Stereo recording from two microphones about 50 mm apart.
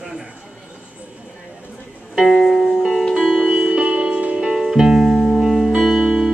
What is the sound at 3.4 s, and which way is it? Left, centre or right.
Music, centre.